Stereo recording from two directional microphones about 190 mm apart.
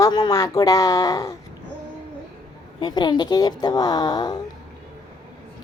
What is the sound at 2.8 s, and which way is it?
Speech, 25° left (ahead or behind).